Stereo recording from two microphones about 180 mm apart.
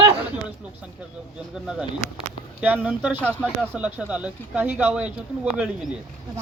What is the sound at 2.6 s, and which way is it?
Speech, 10° right (ahead or behind).